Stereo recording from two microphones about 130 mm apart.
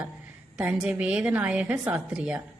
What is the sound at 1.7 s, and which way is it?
Speech, 20° right (ahead or behind).